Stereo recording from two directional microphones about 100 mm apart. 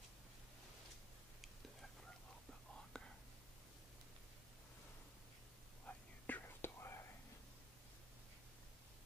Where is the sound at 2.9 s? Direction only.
5° left (ahead or behind).